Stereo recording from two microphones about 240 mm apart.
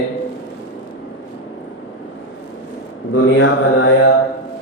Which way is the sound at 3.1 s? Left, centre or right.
Left.